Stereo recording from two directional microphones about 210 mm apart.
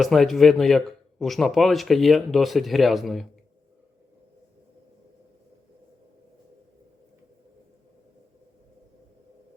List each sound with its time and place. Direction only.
0.0 s speech: centre (ahead or behind)